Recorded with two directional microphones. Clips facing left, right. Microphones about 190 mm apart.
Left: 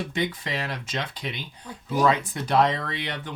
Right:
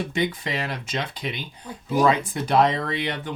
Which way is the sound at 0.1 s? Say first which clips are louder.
Right 3 dB; 15° right (ahead or behind).